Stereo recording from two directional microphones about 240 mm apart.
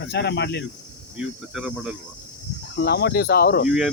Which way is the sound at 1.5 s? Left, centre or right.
Centre.